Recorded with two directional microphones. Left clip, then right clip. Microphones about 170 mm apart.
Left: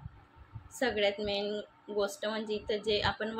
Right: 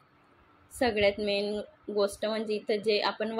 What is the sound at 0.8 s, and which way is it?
A woman's voice, 25° right (ahead or behind).